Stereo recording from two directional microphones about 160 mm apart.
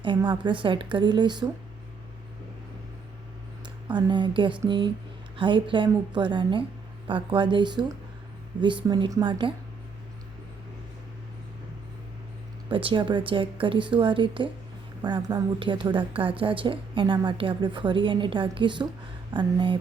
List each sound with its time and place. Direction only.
0.0 s a woman's voice: 30° right (ahead or behind)
3.8 s a woman's voice: 30° right (ahead or behind)
12.7 s a woman's voice: 30° right (ahead or behind)